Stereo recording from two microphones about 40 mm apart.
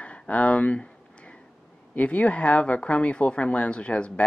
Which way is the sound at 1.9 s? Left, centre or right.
Left.